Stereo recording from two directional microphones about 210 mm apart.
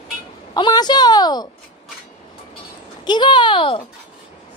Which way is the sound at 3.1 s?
20° left (ahead or behind).